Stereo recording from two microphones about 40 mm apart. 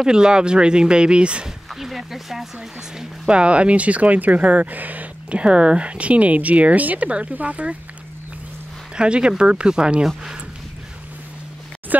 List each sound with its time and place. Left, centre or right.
0.0 s speech: centre
1.8 s speech: centre
3.3 s speech: right
5.3 s speech: right
8.9 s speech: right
11.9 s a sound: right